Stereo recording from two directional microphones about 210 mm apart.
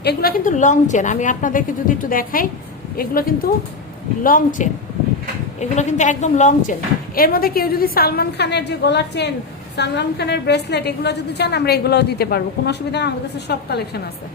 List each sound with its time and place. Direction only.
0.0 s a woman's voice: 50° left (ahead or behind)